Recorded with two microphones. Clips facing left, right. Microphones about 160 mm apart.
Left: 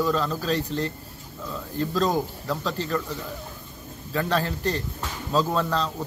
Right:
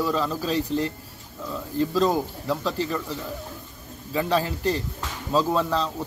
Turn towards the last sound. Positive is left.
turn(degrees=-5)  # may be behind; listen again after turning